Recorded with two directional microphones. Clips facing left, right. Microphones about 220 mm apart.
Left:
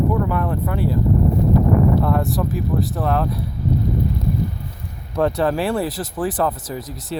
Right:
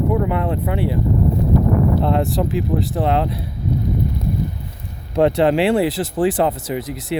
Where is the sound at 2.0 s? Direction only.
25° right (ahead or behind).